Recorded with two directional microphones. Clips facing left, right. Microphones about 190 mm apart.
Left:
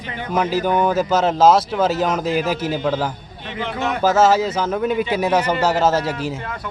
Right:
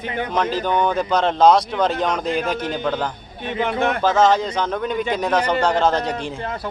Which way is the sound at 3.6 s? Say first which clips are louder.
Right 3 dB; 55° right (ahead or behind).